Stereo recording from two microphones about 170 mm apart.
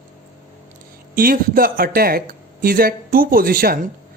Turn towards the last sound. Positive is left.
turn(degrees=-60)  # may be behind; listen again after turning